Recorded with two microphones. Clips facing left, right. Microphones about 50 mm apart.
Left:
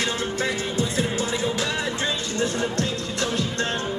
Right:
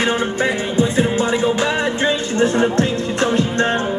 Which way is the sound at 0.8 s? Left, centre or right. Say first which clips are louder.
Right 10 dB; right.